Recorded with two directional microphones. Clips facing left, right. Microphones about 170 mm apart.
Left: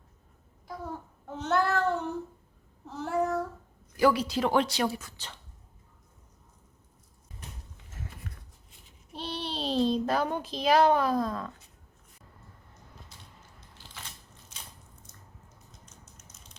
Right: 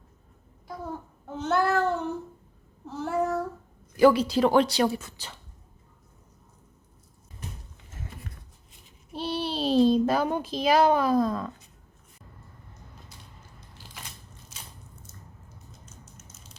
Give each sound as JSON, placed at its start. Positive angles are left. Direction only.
{"t": 1.4, "sound": "a child's voice", "side_deg": 0}
{"t": 3.9, "sound": "a woman's voice", "side_deg": -25}
{"t": 5.1, "sound": "a woman's voice", "side_deg": -10}
{"t": 9.1, "sound": "a child's voice", "side_deg": -5}
{"t": 13.7, "sound": "crushing", "side_deg": -10}
{"t": 15.1, "sound": "squish", "side_deg": -5}
{"t": 15.9, "sound": "a sound", "side_deg": -5}